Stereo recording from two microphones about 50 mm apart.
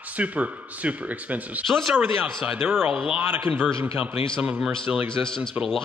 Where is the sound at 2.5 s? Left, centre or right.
Right.